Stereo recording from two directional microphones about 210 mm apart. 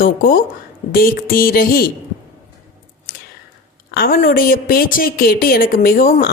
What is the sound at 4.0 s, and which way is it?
A woman's voice, 45° left (ahead or behind).